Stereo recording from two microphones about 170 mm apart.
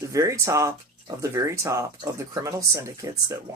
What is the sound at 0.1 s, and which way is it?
Speech, 20° right (ahead or behind).